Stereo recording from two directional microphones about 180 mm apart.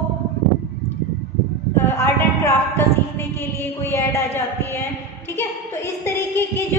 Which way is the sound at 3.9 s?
15° left (ahead or behind).